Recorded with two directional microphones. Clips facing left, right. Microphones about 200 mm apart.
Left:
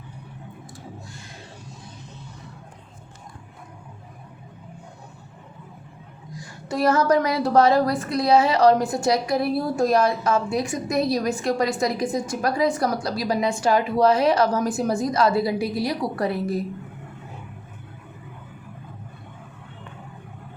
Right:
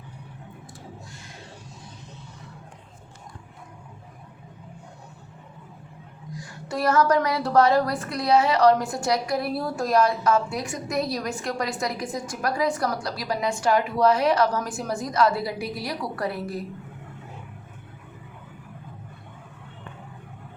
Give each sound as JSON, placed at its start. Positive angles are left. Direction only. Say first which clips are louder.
{"t": 6.7, "sound": "a woman's voice", "louder": "left 2 dB", "side_deg": 20}